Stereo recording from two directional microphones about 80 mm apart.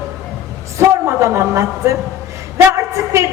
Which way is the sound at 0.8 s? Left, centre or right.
Right.